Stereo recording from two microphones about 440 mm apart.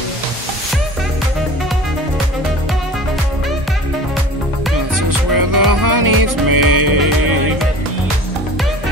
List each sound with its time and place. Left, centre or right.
5.3 s music: right